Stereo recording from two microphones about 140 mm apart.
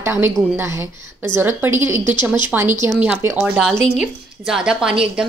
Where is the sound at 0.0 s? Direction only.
15° right (ahead or behind).